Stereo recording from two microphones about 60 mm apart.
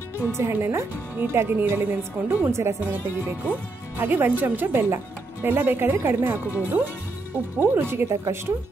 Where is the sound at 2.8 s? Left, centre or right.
Right.